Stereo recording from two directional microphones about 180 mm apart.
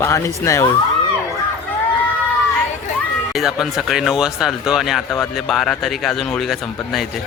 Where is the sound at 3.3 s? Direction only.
Centre (ahead or behind).